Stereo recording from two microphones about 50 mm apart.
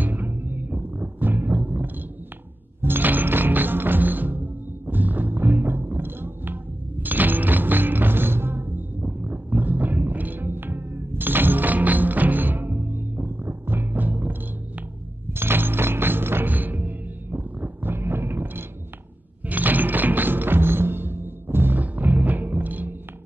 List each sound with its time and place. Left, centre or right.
0.0 s music: right
15.3 s music: right
19.4 s music: right